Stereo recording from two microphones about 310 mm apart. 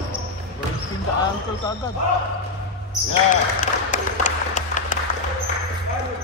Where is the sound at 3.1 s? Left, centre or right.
Left.